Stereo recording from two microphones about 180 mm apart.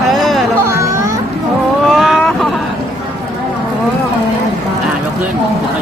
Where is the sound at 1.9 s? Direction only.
Centre (ahead or behind).